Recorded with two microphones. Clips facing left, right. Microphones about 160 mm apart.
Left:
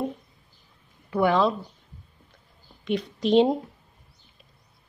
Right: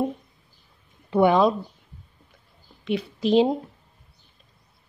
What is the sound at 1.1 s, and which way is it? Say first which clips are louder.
Speech: right 4 dB; 20° right (ahead or behind).